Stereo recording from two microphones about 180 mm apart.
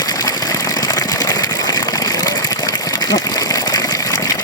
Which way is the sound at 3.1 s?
20° left (ahead or behind).